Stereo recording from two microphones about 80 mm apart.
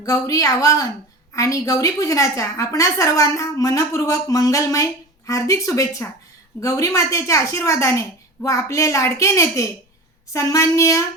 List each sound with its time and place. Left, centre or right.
0.0 s a woman's voice: left